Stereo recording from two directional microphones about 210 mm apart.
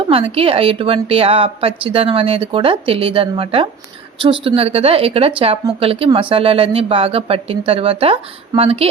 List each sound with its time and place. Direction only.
0.1 s a woman's voice: 25° right (ahead or behind)